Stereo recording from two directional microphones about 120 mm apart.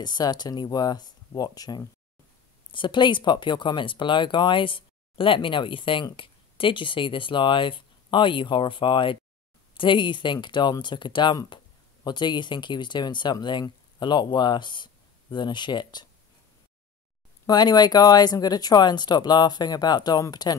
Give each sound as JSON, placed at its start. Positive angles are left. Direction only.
{"t": 0.0, "sound": "speech", "side_deg": 35}
{"t": 2.7, "sound": "speech", "side_deg": 40}
{"t": 17.5, "sound": "speech", "side_deg": 35}